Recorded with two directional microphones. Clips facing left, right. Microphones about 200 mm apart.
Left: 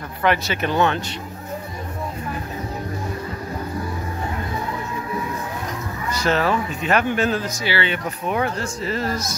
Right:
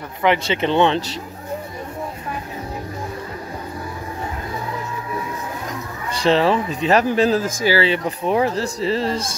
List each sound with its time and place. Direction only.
0.2 s speech: 20° right (ahead or behind)
6.0 s speech: 30° right (ahead or behind)